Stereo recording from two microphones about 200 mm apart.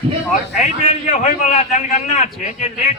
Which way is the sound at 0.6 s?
35° left (ahead or behind).